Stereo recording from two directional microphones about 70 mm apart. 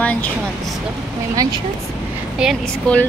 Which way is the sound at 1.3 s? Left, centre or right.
Right.